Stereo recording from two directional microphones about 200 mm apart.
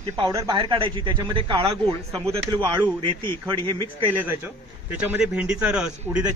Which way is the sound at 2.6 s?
15° right (ahead or behind).